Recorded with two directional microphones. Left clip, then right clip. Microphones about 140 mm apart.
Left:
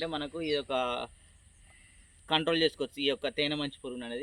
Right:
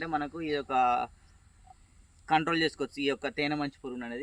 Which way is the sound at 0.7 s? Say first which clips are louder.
Right 5 dB; 45° right (ahead or behind).